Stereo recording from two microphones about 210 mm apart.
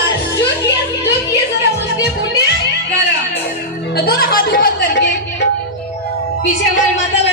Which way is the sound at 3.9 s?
50° left (ahead or behind).